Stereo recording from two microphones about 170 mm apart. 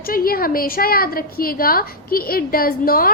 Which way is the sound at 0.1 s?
60° left (ahead or behind).